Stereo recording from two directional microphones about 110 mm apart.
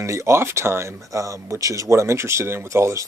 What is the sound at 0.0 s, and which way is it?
Speech, 25° right (ahead or behind).